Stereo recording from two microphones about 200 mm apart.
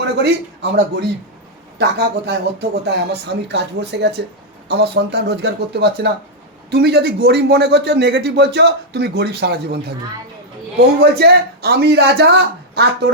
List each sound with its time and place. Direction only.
0.0 s a man's voice: 55° right (ahead or behind)
11.1 s a man's voice: 55° right (ahead or behind)